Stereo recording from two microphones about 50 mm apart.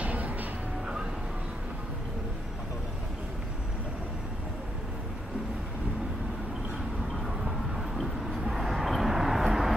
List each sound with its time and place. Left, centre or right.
0.0 s music: right
7.2 s vehicle: centre